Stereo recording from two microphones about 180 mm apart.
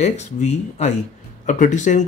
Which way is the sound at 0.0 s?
40° left (ahead or behind).